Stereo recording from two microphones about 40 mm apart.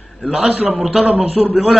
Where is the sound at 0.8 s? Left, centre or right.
Centre.